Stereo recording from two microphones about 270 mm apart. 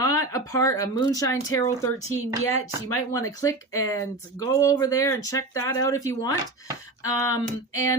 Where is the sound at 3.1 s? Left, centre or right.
Centre.